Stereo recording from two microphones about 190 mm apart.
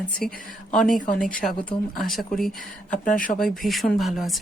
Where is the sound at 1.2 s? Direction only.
45° left (ahead or behind).